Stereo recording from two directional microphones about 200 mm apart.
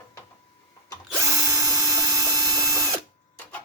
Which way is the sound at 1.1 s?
15° right (ahead or behind).